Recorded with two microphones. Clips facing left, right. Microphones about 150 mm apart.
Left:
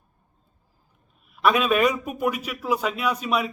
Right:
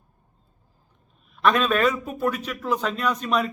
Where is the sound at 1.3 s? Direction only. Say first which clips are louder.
Even; 10° left (ahead or behind).